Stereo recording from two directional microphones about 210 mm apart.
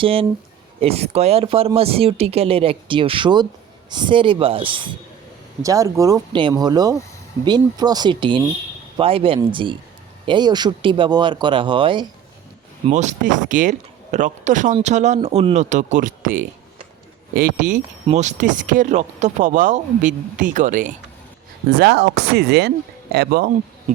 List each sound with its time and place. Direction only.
0.0 s speech: 25° right (ahead or behind)
12.8 s speech: 35° right (ahead or behind)
21.7 s speech: 50° right (ahead or behind)